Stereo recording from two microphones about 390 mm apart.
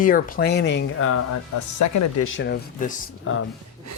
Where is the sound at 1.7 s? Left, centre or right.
Left.